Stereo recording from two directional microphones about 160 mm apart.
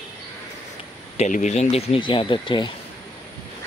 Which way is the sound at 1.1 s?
45° left (ahead or behind).